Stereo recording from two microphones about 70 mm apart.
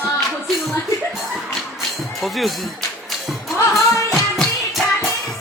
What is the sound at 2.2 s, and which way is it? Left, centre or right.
Music, centre.